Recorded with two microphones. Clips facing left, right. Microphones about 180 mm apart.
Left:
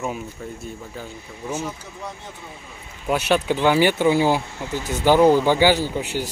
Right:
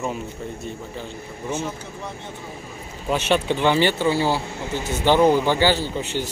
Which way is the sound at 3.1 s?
10° left (ahead or behind).